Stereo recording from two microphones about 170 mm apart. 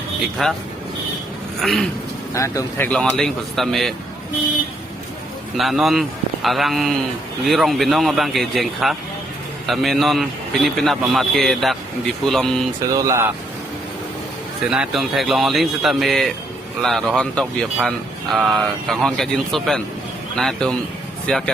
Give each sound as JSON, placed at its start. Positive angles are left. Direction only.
{"t": 0.2, "sound": "speech", "side_deg": 0}
{"t": 2.3, "sound": "speech", "side_deg": 20}
{"t": 5.5, "sound": "speech", "side_deg": 0}
{"t": 12.8, "sound": "speech", "side_deg": -20}
{"t": 14.7, "sound": "speech", "side_deg": -5}